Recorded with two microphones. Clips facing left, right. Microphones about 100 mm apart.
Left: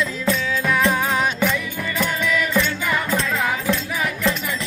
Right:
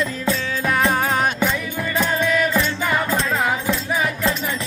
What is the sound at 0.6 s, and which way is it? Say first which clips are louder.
Music: right 1 dB; 40° right (ahead or behind).